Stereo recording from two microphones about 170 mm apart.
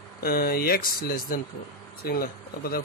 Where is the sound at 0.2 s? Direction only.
60° left (ahead or behind).